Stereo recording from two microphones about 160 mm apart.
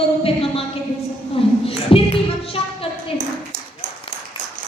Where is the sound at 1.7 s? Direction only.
35° left (ahead or behind).